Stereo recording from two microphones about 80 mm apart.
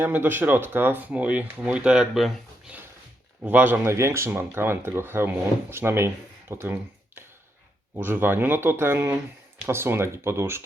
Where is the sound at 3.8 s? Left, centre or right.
Right.